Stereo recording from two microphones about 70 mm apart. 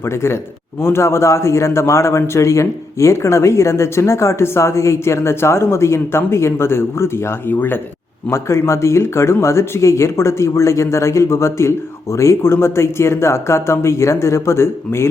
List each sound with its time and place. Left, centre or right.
0.0 s a man's voice: left
8.3 s a man's voice: left